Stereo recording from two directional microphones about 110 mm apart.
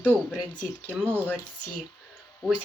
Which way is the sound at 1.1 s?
15° left (ahead or behind).